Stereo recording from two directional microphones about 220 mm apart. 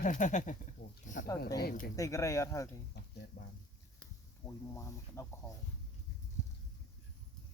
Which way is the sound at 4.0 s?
10° left (ahead or behind).